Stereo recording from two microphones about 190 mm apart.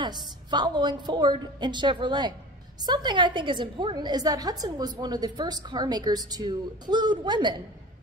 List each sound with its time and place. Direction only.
0.0 s a woman's voice: 20° right (ahead or behind)